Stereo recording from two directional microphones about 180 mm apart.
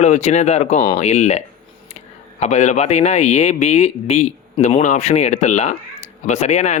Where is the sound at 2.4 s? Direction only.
40° left (ahead or behind).